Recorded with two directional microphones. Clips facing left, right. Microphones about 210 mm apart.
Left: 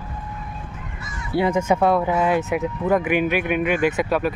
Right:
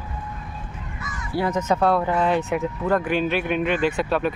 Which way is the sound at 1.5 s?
10° left (ahead or behind).